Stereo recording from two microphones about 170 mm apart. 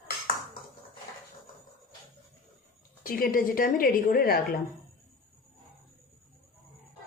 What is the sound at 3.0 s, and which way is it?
A woman's voice, 55° left (ahead or behind).